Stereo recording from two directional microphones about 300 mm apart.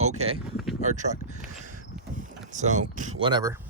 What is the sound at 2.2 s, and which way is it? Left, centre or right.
Boat, right.